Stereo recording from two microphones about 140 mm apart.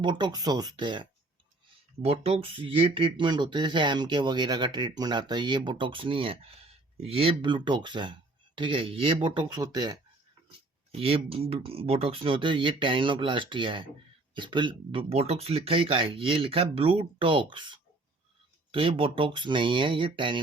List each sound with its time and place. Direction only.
0.0 s speech: 30° right (ahead or behind)
2.0 s speech: 45° right (ahead or behind); by 10.0 s 25° right (ahead or behind)
10.9 s speech: 40° right (ahead or behind)
15.1 s speech: 45° right (ahead or behind)